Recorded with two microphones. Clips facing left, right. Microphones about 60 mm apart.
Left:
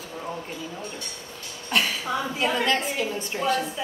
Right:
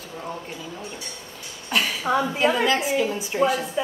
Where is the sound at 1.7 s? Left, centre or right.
Centre.